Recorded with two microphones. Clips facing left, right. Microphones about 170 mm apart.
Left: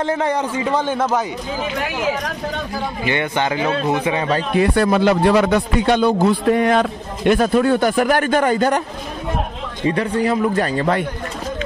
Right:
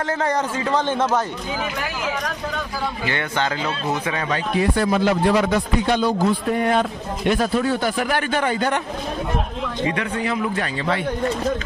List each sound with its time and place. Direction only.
0.0 s a man's voice: 15° left (ahead or behind)
3.1 s a man's voice: 15° left (ahead or behind)
4.6 s speech: 65° left (ahead or behind); by 7.3 s 90° left
7.3 s a man's voice: 55° left (ahead or behind)
9.8 s a man's voice: 35° left (ahead or behind)